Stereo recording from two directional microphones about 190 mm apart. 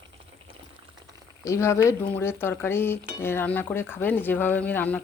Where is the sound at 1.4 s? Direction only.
15° left (ahead or behind).